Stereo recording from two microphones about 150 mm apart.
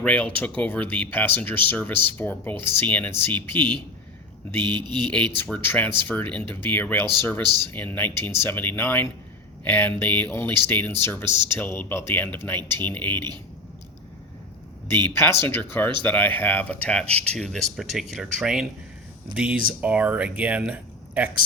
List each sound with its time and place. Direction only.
0.0 s speech: 10° left (ahead or behind)
4.6 s speech: 30° right (ahead or behind)
5.1 s speech: 10° left (ahead or behind)
15.0 s speech: 15° left (ahead or behind); by 21.2 s 10° right (ahead or behind)